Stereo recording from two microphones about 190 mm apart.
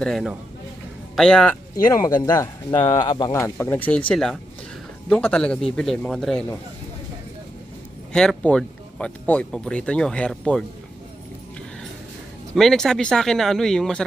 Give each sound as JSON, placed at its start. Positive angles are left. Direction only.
{"t": 0.0, "sound": "speech", "side_deg": 0}
{"t": 1.9, "sound": "speech", "side_deg": 20}
{"t": 8.1, "sound": "speech", "side_deg": 5}
{"t": 12.5, "sound": "speech", "side_deg": 0}